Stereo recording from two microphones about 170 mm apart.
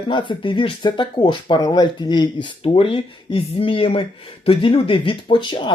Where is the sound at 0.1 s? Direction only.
30° left (ahead or behind).